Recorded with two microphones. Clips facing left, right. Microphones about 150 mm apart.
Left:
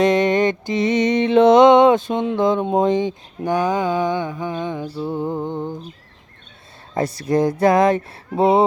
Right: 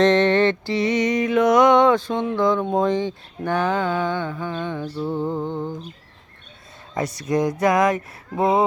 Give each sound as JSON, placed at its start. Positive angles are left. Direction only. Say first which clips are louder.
{"t": 0.0, "sound": "music", "louder": "even", "side_deg": 10}
{"t": 6.9, "sound": "speech", "louder": "left 3 dB", "side_deg": 30}